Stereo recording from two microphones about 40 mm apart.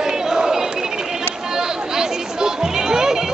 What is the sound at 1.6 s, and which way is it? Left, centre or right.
Music, centre.